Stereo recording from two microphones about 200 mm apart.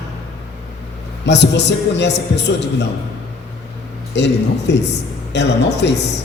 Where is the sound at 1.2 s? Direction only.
60° left (ahead or behind).